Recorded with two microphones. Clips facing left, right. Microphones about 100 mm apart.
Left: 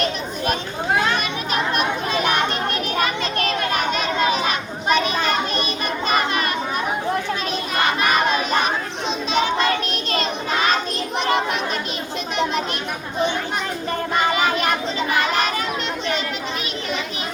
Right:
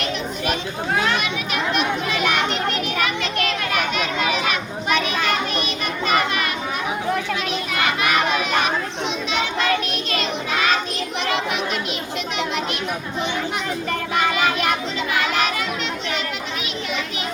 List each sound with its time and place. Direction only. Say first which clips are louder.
1.7 s a sound: even; 35° left (ahead or behind)
2.9 s children playing: left 1 dB; 35° left (ahead or behind)
7.7 s crowd: left 2 dB; 30° left (ahead or behind)
9.3 s child singing: left 3 dB; 35° left (ahead or behind)
14.2 s child singing: even; 30° left (ahead or behind)